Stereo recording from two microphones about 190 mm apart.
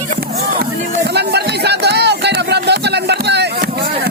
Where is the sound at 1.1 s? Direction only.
60° right (ahead or behind).